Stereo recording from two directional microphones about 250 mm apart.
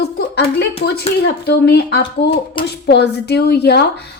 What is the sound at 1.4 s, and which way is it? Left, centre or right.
A woman's voice, left.